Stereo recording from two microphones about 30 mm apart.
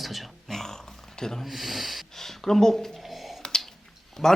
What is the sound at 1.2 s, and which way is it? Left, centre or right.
Speech, centre.